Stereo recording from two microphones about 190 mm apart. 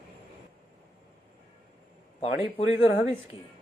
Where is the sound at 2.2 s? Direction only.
30° left (ahead or behind).